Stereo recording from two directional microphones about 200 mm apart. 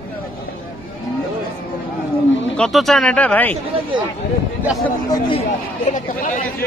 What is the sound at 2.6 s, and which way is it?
Speech, centre (ahead or behind).